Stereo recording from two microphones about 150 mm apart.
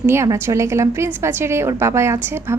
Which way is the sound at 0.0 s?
20° right (ahead or behind).